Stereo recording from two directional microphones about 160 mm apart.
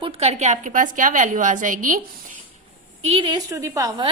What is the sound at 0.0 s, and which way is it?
A woman's voice, 40° right (ahead or behind).